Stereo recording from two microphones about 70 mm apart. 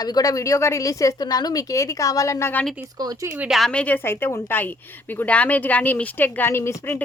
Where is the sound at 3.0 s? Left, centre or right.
Right.